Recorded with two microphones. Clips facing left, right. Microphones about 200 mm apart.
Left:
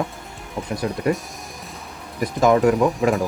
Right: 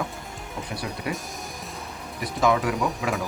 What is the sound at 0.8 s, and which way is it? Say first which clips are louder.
Speech: left 12 dB; 45° left (ahead or behind).